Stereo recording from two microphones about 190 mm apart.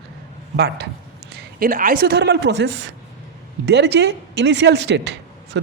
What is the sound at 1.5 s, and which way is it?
Speech, 45° right (ahead or behind).